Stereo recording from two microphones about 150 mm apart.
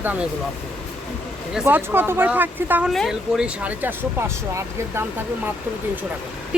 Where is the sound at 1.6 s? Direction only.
15° right (ahead or behind).